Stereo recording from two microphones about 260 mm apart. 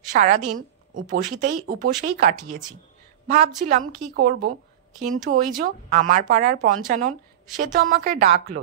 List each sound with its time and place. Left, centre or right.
0.1 s a woman's voice: right